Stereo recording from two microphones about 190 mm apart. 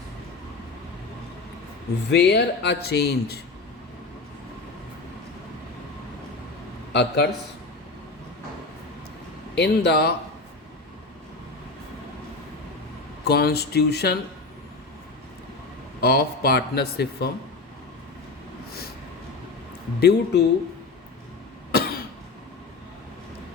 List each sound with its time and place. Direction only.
2.0 s speech: 65° left (ahead or behind)
6.9 s speech: 65° left (ahead or behind)
9.6 s speech: 60° left (ahead or behind)
13.2 s speech: 55° left (ahead or behind)
16.0 s speech: 55° left (ahead or behind)
20.0 s speech: 60° left (ahead or behind)
21.7 s cough: 55° left (ahead or behind)